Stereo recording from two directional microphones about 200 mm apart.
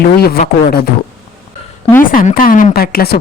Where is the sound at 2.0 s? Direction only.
45° left (ahead or behind).